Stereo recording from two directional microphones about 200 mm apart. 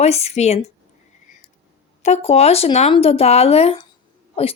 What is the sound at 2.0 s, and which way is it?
A woman's voice, 30° left (ahead or behind).